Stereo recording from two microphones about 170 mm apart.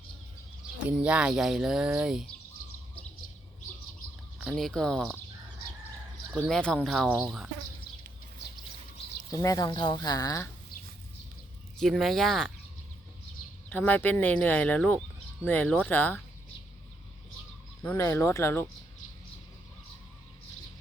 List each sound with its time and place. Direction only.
0.8 s speech: 5° right (ahead or behind)
4.4 s speech: centre (ahead or behind)
6.3 s speech: 5° left (ahead or behind)
9.3 s speech: 20° left (ahead or behind)
11.8 s speech: centre (ahead or behind)
13.7 s speech: 10° left (ahead or behind)
17.8 s speech: 15° left (ahead or behind)